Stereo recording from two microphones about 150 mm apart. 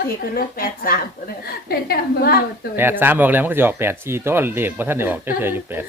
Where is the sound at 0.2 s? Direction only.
80° left.